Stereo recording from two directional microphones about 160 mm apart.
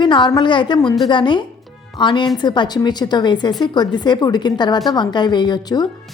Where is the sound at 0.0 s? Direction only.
30° left (ahead or behind).